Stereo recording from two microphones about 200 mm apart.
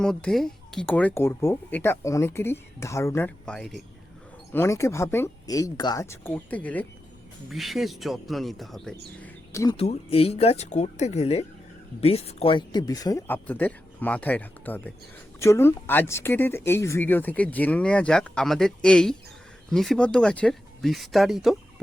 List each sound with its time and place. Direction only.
0.0 s speech: 5° left (ahead or behind)
4.5 s speech: 15° left (ahead or behind)
9.1 s bird: 10° left (ahead or behind)
9.7 s speech: 30° left (ahead or behind); by 21.5 s centre (ahead or behind)